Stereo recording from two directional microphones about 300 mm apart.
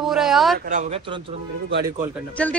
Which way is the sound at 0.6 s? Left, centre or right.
Right.